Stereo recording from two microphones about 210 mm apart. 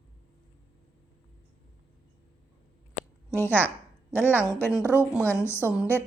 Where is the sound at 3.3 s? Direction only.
10° left (ahead or behind).